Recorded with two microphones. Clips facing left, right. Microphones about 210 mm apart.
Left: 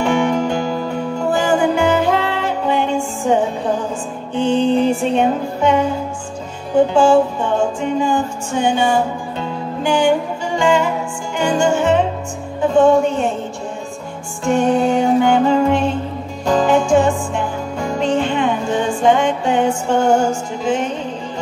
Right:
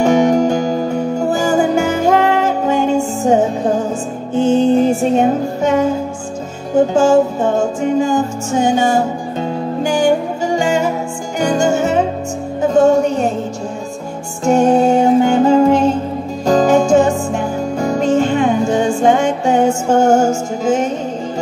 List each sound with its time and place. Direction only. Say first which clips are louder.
0.0 s music: right 5 dB; 40° right (ahead or behind)
14.4 s music: right 4 dB; 40° right (ahead or behind)